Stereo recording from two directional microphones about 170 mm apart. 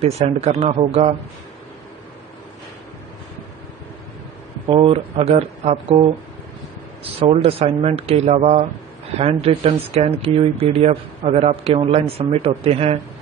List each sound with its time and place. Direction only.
0.0 s speech: 40° right (ahead or behind)
4.6 s speech: 35° right (ahead or behind)
7.2 s speech: 35° right (ahead or behind)